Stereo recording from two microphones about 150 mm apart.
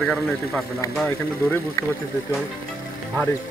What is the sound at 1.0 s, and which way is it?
Speech, 15° left (ahead or behind).